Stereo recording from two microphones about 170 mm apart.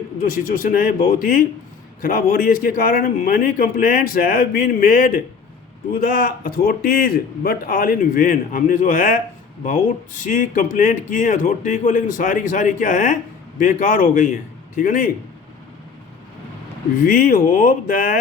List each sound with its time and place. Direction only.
0.2 s a man's voice: 55° left (ahead or behind)
17.0 s a man's voice: 55° left (ahead or behind)